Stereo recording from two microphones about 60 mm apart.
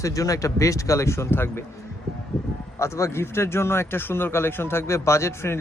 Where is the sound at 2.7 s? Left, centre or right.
Left.